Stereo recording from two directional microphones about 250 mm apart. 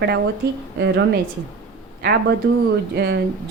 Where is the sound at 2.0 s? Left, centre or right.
Right.